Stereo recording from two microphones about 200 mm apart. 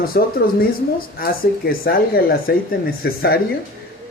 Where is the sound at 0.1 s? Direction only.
50° left (ahead or behind).